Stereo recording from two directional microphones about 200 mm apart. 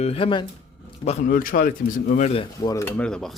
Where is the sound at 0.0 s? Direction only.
30° left (ahead or behind).